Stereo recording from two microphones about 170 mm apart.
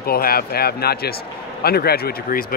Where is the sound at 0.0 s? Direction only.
65° left (ahead or behind).